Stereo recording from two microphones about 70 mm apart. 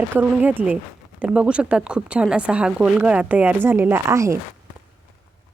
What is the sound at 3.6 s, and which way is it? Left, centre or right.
Speech, right.